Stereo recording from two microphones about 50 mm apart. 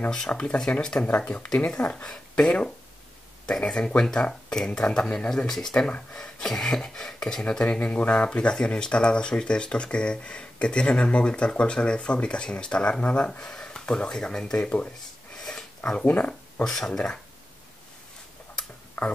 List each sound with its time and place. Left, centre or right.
0.3 s speech: left
5.7 s speech: left
6.1 s speech: centre
7.8 s speech: left
14.6 s speech: left
15.3 s a sound: centre
15.8 s speech: centre
16.1 s speech: left
16.6 s speech: centre